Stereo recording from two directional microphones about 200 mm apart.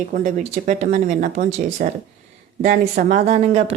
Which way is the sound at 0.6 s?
40° right (ahead or behind).